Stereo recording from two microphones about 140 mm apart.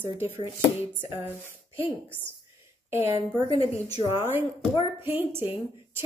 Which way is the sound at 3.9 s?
45° left (ahead or behind).